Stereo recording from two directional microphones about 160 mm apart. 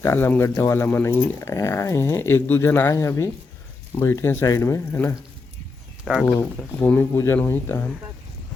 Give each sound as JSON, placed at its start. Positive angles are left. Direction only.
{"t": 0.0, "sound": "speech", "side_deg": 15}
{"t": 6.2, "sound": "speech", "side_deg": 10}